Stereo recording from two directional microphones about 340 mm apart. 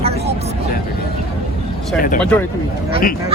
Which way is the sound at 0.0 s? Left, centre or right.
Centre.